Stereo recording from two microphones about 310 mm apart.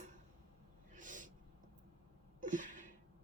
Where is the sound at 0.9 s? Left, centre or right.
Right.